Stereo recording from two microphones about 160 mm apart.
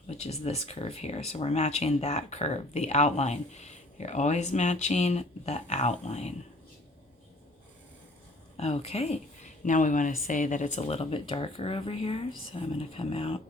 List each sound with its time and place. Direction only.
0.1 s speech: 40° left (ahead or behind)
8.5 s speech: 40° left (ahead or behind)
9.6 s speech: 55° left (ahead or behind); by 13.4 s 35° left (ahead or behind)